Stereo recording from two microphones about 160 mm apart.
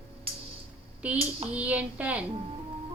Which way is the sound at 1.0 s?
10° right (ahead or behind).